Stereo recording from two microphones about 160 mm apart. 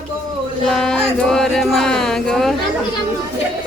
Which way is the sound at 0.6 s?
5° left (ahead or behind).